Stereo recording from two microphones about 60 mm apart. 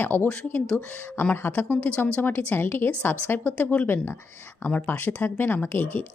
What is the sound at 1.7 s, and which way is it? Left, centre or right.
Speech, left.